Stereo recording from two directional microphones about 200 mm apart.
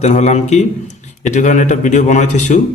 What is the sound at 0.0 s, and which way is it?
Speech, 35° left (ahead or behind).